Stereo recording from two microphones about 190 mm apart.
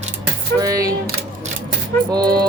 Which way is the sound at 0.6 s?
20° right (ahead or behind).